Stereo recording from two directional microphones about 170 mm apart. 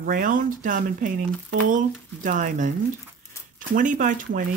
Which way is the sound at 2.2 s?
50° right (ahead or behind).